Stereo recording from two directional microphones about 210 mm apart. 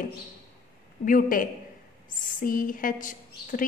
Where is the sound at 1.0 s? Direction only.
40° left (ahead or behind).